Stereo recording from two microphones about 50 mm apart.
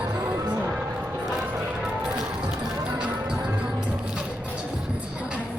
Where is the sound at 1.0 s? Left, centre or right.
Right.